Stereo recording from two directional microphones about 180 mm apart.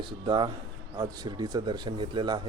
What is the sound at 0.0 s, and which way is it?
Speech, 25° right (ahead or behind).